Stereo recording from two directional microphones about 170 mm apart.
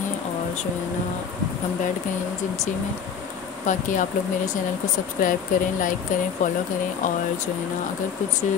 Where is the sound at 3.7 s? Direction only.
50° left (ahead or behind).